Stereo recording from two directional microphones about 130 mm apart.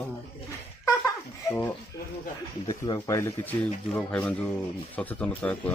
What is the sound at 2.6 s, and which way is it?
Speech, 40° left (ahead or behind).